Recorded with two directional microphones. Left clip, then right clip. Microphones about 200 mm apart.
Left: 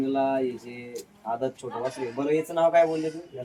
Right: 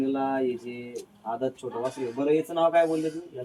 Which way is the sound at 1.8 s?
50° right (ahead or behind).